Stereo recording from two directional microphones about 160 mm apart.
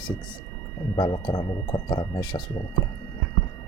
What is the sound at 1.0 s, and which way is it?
Speech, 30° left (ahead or behind).